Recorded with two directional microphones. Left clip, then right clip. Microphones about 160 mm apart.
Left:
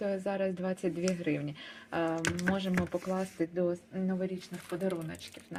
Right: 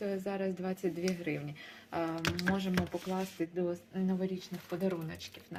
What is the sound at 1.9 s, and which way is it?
Speech, 30° left (ahead or behind).